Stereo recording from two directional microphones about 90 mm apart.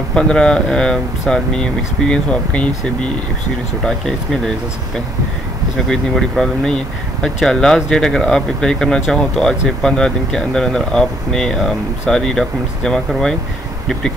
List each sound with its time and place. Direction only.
0.1 s speech: 10° left (ahead or behind)
3.8 s speech: 5° left (ahead or behind)
5.9 s speech: 5° left (ahead or behind)